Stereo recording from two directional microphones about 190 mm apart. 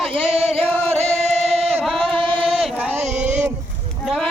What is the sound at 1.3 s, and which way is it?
Chant, 35° right (ahead or behind).